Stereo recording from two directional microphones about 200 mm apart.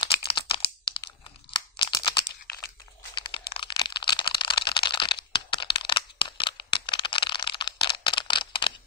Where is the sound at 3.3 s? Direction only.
25° left (ahead or behind).